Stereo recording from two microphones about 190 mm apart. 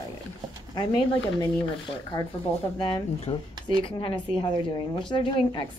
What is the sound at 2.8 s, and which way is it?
A woman's voice, 25° left (ahead or behind).